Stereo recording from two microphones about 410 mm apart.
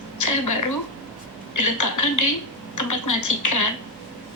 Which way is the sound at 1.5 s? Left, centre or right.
Left.